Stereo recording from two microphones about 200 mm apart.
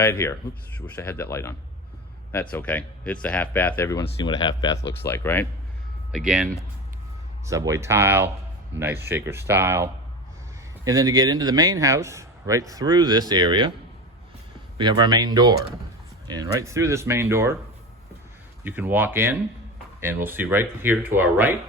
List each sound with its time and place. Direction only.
0.0 s speech: 15° left (ahead or behind)
4.0 s speech: 20° left (ahead or behind)
6.1 s speech: 5° right (ahead or behind)
7.4 s a man's voice: 15° right (ahead or behind)
14.8 s a man's voice: 20° right (ahead or behind)
18.6 s speech: 10° right (ahead or behind)